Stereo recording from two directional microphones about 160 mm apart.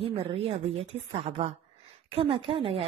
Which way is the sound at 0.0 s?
35° right (ahead or behind).